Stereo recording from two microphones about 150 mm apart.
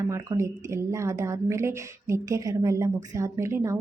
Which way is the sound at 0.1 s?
20° right (ahead or behind).